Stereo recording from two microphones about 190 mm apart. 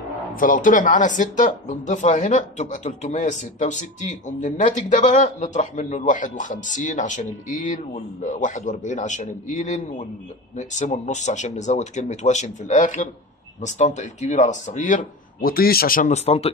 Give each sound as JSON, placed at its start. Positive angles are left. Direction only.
{"t": 0.4, "sound": "speech", "side_deg": 45}
{"t": 15.4, "sound": "speech", "side_deg": 50}